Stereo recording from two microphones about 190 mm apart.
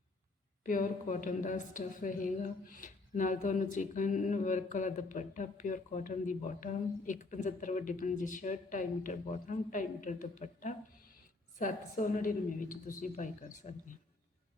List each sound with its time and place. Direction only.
0.6 s a woman's voice: 45° left (ahead or behind)